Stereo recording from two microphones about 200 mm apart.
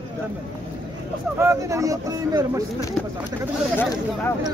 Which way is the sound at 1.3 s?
15° right (ahead or behind).